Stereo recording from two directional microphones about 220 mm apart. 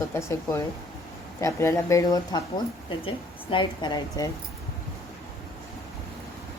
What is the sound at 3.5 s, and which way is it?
Speech, 20° left (ahead or behind).